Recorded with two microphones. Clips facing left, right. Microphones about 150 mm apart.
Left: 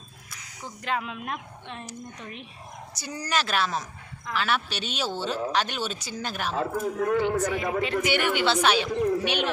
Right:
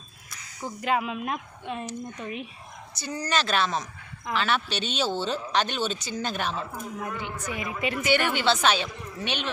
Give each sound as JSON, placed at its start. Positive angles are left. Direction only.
{"t": 0.8, "sound": "speech", "side_deg": -10}
{"t": 2.9, "sound": "speech", "side_deg": 15}
{"t": 6.6, "sound": "speech", "side_deg": 60}
{"t": 8.0, "sound": "speech", "side_deg": 15}
{"t": 8.9, "sound": "speech", "side_deg": 50}
{"t": 9.2, "sound": "speech", "side_deg": 10}